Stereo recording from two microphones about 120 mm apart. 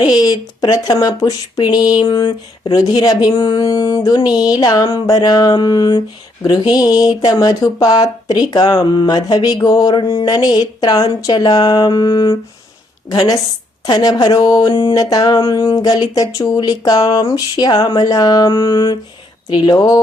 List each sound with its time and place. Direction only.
0.0 s speech: 35° left (ahead or behind)